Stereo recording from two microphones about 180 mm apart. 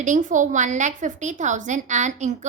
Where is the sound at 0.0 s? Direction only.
45° right (ahead or behind).